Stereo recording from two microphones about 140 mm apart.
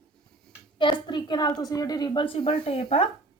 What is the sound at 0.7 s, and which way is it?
A woman's voice, 35° left (ahead or behind).